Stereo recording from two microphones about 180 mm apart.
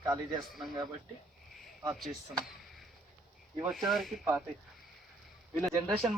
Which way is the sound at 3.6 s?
Centre (ahead or behind).